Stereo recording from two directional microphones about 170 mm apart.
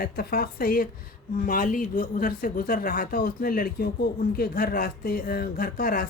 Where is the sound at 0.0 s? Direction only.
60° left (ahead or behind).